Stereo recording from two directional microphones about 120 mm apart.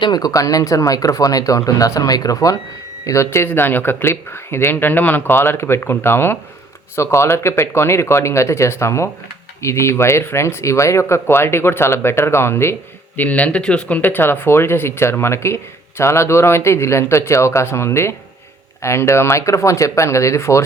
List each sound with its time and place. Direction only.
0.0 s speech: 35° left (ahead or behind)